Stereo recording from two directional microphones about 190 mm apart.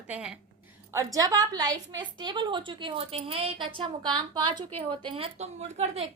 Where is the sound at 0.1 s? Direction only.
5° right (ahead or behind).